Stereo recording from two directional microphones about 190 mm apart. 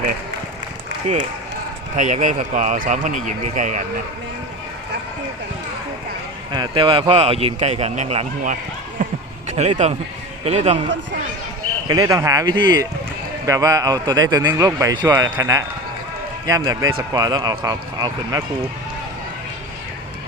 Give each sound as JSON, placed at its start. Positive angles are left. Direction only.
{"t": 2.0, "sound": "a man's voice", "side_deg": -40}
{"t": 6.5, "sound": "a man's voice", "side_deg": -25}
{"t": 9.0, "sound": "a sound", "side_deg": -45}
{"t": 9.5, "sound": "a man's voice", "side_deg": -35}
{"t": 11.9, "sound": "speech", "side_deg": -20}